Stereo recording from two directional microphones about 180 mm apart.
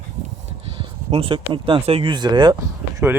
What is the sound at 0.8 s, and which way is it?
Speech, 30° right (ahead or behind).